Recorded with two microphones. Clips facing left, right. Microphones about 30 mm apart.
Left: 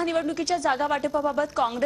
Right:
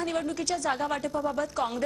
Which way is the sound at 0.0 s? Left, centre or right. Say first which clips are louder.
Left 4 dB; centre.